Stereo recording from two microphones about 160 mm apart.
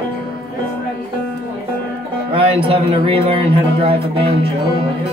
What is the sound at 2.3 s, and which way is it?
A man's voice, 35° right (ahead or behind).